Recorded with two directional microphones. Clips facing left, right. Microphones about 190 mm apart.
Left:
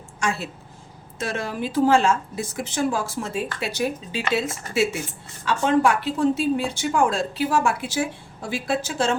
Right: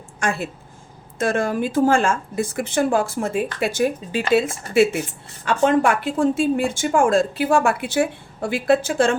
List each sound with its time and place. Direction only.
0.2 s a woman's voice: 55° right (ahead or behind)